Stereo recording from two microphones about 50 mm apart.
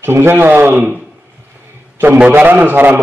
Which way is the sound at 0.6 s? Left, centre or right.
Right.